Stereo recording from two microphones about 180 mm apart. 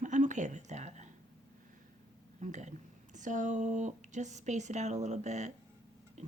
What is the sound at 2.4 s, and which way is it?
Speech, 40° right (ahead or behind).